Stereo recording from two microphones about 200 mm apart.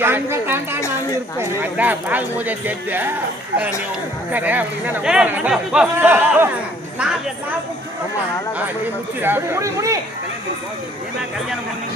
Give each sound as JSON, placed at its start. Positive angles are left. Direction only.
{"t": 0.0, "sound": "speech", "side_deg": -10}
{"t": 4.3, "sound": "speech", "side_deg": -10}
{"t": 9.2, "sound": "speech", "side_deg": -10}